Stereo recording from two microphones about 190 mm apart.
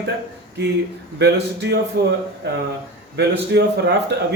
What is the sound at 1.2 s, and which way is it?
Speech, 65° right (ahead or behind).